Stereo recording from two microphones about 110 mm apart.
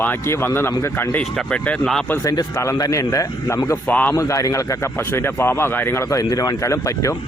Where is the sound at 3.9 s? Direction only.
15° left (ahead or behind).